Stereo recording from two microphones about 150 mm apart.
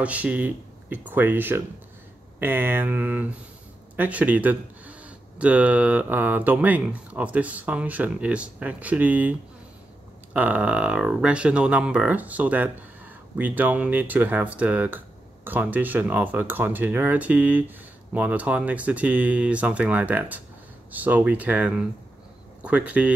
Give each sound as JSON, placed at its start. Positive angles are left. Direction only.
{"t": 0.0, "sound": "speech", "side_deg": -10}
{"t": 10.3, "sound": "speech", "side_deg": -10}